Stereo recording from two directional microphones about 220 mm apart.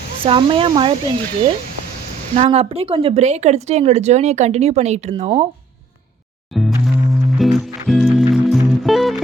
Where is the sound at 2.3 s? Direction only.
30° right (ahead or behind).